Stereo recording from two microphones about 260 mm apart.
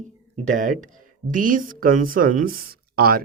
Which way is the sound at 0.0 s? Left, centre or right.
Right.